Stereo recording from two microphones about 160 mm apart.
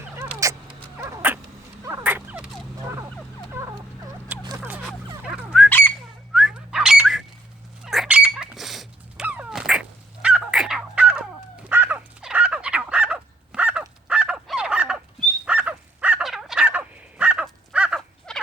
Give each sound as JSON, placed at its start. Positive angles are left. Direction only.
{"t": 0.2, "sound": "cat", "side_deg": -20}
{"t": 1.8, "sound": "a sound", "side_deg": -20}
{"t": 2.0, "sound": "a sound", "side_deg": -10}
{"t": 3.5, "sound": "turkey", "side_deg": -20}
{"t": 4.4, "sound": "a sound", "side_deg": -20}
{"t": 5.2, "sound": "fowl", "side_deg": -5}
{"t": 5.6, "sound": "bird", "side_deg": 10}
{"t": 6.3, "sound": "whistling", "side_deg": -5}
{"t": 7.9, "sound": "dog", "side_deg": -5}
{"t": 10.2, "sound": "fowl", "side_deg": -5}
{"t": 11.6, "sound": "crow", "side_deg": -10}
{"t": 15.4, "sound": "dog", "side_deg": -10}
{"t": 18.3, "sound": "frog", "side_deg": 5}